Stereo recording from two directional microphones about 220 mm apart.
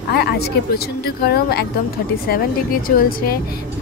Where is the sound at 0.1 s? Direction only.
45° left (ahead or behind).